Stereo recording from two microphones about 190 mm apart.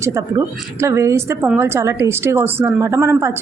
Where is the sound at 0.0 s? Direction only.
15° right (ahead or behind).